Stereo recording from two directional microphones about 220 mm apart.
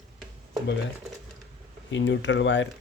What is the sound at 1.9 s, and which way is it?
Speech, 55° left (ahead or behind).